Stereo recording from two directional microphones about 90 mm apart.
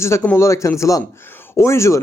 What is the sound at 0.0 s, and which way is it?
Speech, 30° left (ahead or behind).